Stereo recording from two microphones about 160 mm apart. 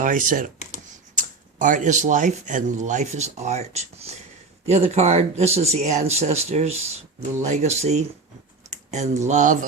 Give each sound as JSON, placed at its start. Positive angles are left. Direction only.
{"t": 0.0, "sound": "speech", "side_deg": -55}